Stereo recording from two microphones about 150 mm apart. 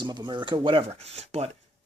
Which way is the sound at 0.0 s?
30° right (ahead or behind).